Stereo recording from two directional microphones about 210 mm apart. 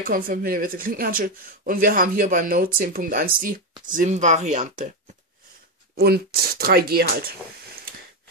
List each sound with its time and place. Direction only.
0.0 s speech: 40° right (ahead or behind)
5.9 s speech: 50° right (ahead or behind)